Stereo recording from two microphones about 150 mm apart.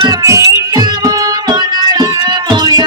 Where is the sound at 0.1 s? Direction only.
20° right (ahead or behind).